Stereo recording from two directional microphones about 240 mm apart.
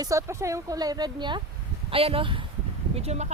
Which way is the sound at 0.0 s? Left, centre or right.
Centre.